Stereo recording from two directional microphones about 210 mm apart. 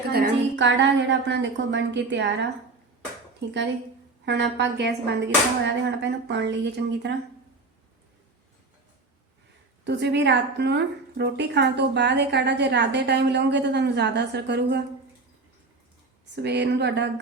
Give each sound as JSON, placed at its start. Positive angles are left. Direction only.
{"t": 0.1, "sound": "speech", "side_deg": -50}
{"t": 4.3, "sound": "speech", "side_deg": -55}
{"t": 9.8, "sound": "a woman's voice", "side_deg": -55}
{"t": 16.3, "sound": "a woman's voice", "side_deg": -55}